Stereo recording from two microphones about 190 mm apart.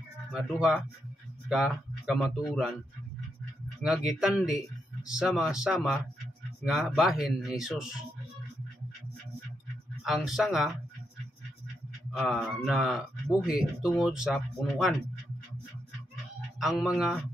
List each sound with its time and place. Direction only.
0.3 s speech: 5° right (ahead or behind)
3.8 s speech: centre (ahead or behind)
10.0 s speech: centre (ahead or behind)
12.1 s speech: centre (ahead or behind)
16.5 s speech: centre (ahead or behind)